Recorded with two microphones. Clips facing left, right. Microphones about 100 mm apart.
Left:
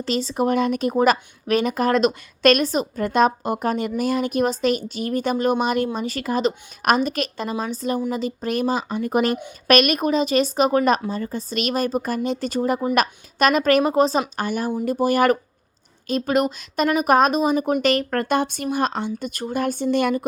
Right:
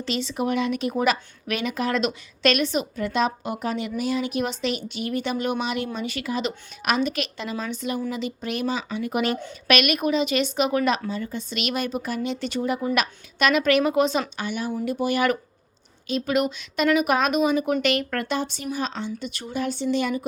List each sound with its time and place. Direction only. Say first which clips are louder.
0.0 s speech: left 4 dB; 40° left (ahead or behind)
18.3 s speech: left 6 dB; 55° left (ahead or behind)